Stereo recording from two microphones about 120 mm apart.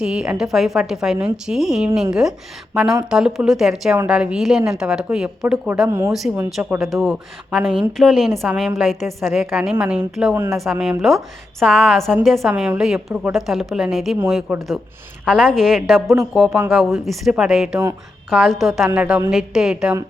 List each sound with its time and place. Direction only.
0.0 s a woman's voice: 5° right (ahead or behind)
6.3 s a woman's voice: 15° right (ahead or behind)
10.3 s speech: 20° right (ahead or behind)
10.6 s a woman's voice: centre (ahead or behind)